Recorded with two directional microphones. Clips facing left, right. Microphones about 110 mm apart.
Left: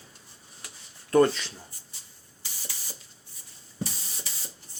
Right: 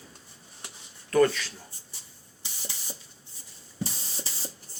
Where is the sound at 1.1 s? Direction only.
25° left (ahead or behind).